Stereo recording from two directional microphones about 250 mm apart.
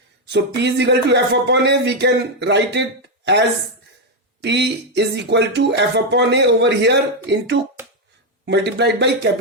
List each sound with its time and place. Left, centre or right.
0.3 s speech: right
4.4 s speech: right